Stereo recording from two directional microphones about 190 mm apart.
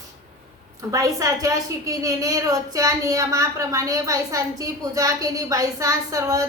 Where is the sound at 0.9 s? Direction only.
15° right (ahead or behind).